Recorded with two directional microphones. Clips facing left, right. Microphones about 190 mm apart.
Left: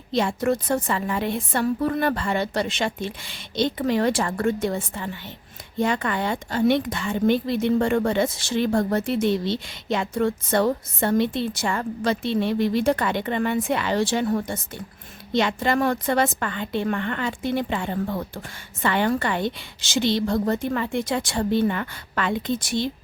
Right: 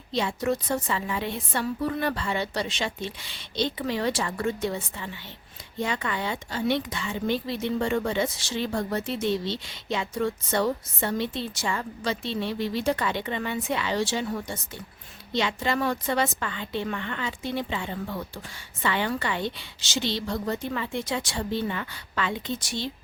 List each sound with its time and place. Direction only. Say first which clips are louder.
0.2 s a woman's voice: left 4 dB; 50° left (ahead or behind)